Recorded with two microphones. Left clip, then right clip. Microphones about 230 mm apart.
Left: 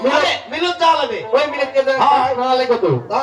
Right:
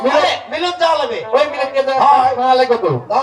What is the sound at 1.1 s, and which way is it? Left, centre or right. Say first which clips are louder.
Speech: right 2 dB; right.